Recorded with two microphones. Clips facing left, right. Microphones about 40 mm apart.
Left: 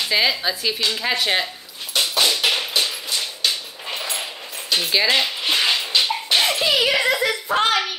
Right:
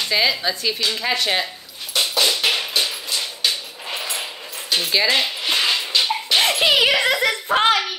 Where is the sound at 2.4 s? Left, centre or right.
Centre.